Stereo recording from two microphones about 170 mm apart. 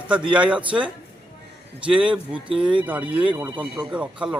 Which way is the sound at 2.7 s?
10° right (ahead or behind).